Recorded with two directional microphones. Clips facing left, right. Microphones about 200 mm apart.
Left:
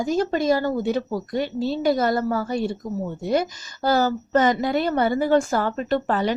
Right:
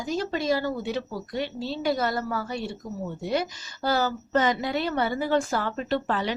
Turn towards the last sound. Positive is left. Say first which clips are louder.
# left 4 dB
turn(degrees=45)  # may be behind; listen again after turning